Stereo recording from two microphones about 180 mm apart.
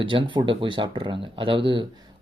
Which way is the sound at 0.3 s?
25° right (ahead or behind).